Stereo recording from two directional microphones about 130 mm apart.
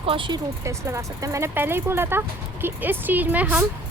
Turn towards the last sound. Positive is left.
turn(degrees=-10)  # may be behind; listen again after turning